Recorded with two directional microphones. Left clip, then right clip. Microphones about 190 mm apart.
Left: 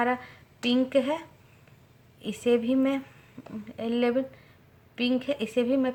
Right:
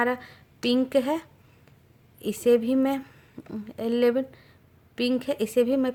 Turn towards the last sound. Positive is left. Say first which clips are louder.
# right 3 dB
turn(degrees=-55)  # may be behind; listen again after turning